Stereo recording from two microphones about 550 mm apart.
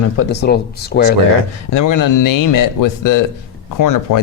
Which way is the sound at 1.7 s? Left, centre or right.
Left.